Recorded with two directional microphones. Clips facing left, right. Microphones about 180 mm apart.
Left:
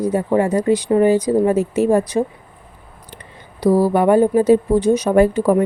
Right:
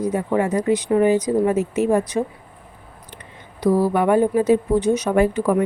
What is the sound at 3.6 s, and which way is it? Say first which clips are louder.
A woman's voice: left 3 dB; 35° left (ahead or behind).